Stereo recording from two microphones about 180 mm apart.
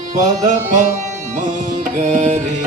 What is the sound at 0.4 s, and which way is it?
Music, 45° right (ahead or behind).